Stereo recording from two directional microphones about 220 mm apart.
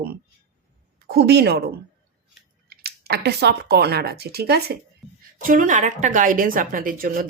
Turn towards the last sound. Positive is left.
turn(degrees=-40)  # may be behind; listen again after turning